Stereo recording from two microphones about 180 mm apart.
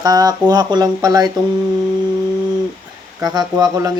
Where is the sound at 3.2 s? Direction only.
20° right (ahead or behind).